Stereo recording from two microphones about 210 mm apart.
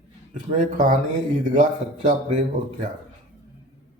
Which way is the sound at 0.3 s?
35° right (ahead or behind).